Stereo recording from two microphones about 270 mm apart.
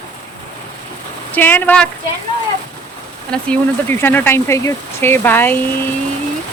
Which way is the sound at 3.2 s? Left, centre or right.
Centre.